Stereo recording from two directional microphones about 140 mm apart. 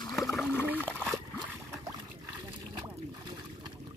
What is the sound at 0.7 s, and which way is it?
Splash, 15° right (ahead or behind).